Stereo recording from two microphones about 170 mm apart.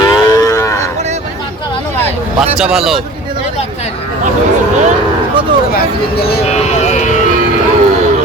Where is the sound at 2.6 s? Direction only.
5° right (ahead or behind).